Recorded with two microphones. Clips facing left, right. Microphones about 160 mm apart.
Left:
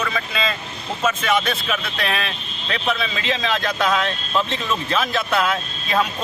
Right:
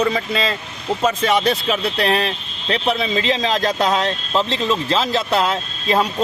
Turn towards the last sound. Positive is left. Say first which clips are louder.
# right 3 dB
turn(degrees=-30)  # may be behind; listen again after turning